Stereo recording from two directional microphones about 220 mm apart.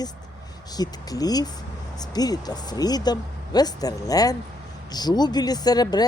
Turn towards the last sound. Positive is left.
turn(degrees=20)  # may be behind; listen again after turning